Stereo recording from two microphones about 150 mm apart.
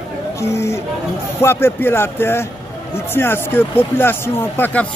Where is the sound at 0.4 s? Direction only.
20° left (ahead or behind).